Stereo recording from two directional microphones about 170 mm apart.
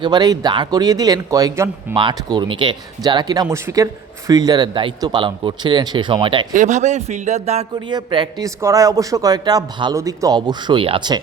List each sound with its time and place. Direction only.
0.0 s a man's voice: 25° right (ahead or behind)
2.0 s a man's voice: 25° right (ahead or behind)
6.5 s speech: 45° right (ahead or behind)
7.9 s a man's voice: 25° right (ahead or behind)